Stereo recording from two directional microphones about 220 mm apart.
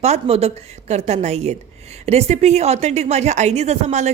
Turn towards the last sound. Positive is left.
turn(degrees=-30)  # may be behind; listen again after turning